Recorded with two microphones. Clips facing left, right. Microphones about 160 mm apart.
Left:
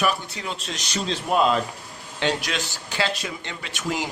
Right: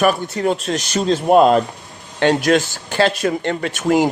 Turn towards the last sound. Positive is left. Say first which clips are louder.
# right 12 dB
turn(degrees=-50)  # may be behind; listen again after turning